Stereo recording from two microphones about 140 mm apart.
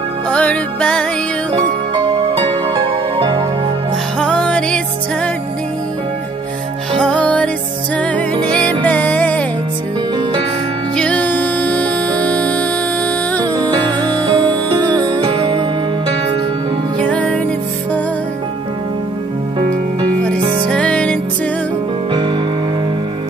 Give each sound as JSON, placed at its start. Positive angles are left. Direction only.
{"t": 0.3, "sound": "music", "side_deg": 10}
{"t": 2.9, "sound": "music", "side_deg": -35}
{"t": 4.2, "sound": "music", "side_deg": 5}
{"t": 7.0, "sound": "music", "side_deg": 10}
{"t": 11.0, "sound": "music", "side_deg": 10}
{"t": 13.6, "sound": "music", "side_deg": -30}
{"t": 17.0, "sound": "music", "side_deg": 10}
{"t": 20.7, "sound": "music", "side_deg": 10}